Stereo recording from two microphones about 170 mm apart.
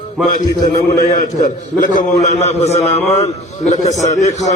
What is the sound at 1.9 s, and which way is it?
A man's voice, 45° left (ahead or behind).